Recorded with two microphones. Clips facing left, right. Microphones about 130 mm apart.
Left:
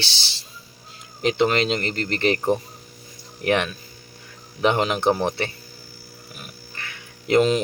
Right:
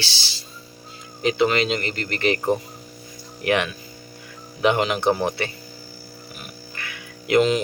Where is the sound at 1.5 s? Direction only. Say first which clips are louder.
Even; 40° left (ahead or behind).